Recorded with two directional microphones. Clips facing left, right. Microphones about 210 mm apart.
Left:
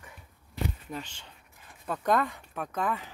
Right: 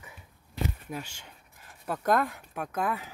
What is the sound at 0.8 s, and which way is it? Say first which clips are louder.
Speech: right 1 dB; 10° right (ahead or behind).